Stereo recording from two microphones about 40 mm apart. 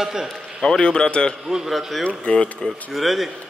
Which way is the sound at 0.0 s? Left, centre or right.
Centre.